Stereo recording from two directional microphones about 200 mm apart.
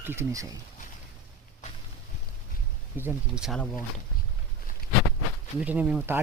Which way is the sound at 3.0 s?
5° right (ahead or behind).